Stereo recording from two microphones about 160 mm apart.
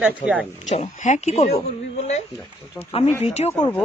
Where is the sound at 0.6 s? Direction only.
45° left (ahead or behind).